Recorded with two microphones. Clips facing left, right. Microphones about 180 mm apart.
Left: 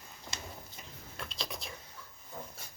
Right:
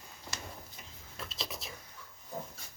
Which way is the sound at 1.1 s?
Centre (ahead or behind).